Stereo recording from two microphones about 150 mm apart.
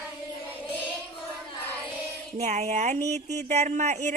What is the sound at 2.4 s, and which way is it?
Speech, 50° right (ahead or behind).